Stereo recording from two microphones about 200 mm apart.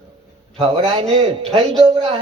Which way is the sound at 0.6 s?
25° right (ahead or behind).